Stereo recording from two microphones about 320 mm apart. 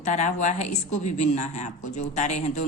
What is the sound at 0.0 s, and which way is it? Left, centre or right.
A woman's voice, left.